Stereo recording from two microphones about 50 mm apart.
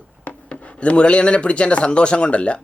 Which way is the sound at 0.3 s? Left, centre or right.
Left.